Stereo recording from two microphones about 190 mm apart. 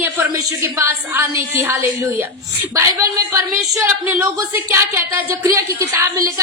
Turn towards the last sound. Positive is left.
turn(degrees=-20)  # may be behind; listen again after turning